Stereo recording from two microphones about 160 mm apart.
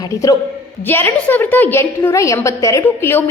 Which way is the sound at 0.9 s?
15° left (ahead or behind).